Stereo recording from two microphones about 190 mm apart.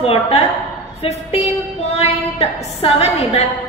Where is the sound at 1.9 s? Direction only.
35° left (ahead or behind).